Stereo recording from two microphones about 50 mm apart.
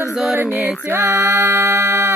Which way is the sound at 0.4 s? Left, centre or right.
Right.